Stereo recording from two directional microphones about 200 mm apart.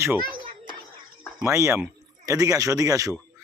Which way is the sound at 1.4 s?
15° right (ahead or behind).